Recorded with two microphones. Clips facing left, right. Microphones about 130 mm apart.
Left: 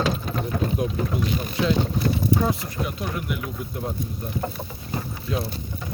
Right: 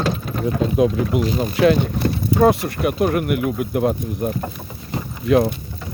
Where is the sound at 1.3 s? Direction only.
75° right (ahead or behind).